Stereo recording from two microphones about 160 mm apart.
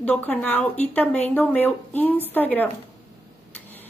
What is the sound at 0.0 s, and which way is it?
Speech, 10° left (ahead or behind).